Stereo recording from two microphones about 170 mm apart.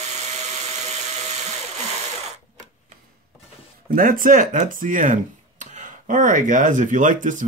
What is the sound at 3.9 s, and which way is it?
Speech, 55° right (ahead or behind).